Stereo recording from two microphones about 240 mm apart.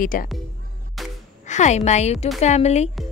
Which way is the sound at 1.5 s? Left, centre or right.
Left.